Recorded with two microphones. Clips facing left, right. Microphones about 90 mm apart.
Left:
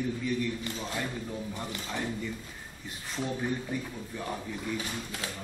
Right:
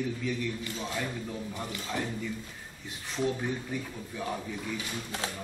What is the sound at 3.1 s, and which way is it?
Speech, centre (ahead or behind).